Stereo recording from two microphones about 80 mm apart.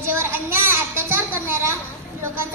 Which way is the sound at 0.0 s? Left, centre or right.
Right.